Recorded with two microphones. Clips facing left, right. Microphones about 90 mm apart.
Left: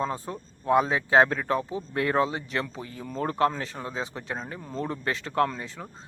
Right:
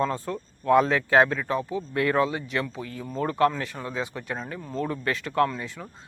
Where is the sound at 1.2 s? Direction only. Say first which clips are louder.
Even; 40° left (ahead or behind).